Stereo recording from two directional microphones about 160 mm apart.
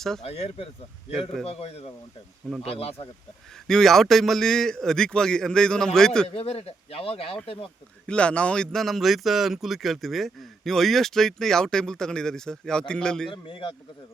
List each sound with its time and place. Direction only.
0.2 s speech: 40° left (ahead or behind)
3.7 s speech: centre (ahead or behind)
6.2 s speech: 40° left (ahead or behind)
8.0 s speech: 5° left (ahead or behind)
13.3 s speech: 30° left (ahead or behind)